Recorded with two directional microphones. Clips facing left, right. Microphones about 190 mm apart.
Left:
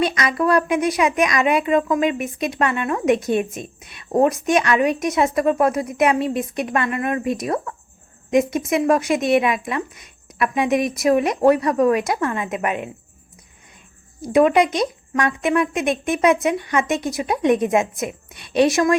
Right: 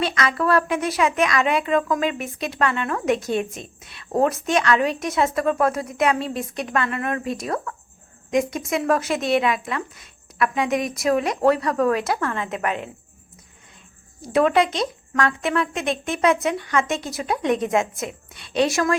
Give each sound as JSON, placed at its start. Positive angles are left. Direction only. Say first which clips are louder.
{"t": 0.0, "sound": "speech", "louder": "left 3 dB", "side_deg": 20}
{"t": 14.2, "sound": "speech", "louder": "left 3 dB", "side_deg": 15}